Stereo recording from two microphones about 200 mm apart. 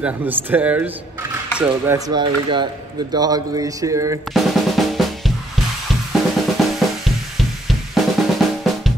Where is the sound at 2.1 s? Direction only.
25° right (ahead or behind).